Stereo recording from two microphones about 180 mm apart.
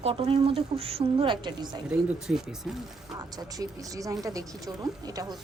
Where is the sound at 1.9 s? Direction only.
Centre (ahead or behind).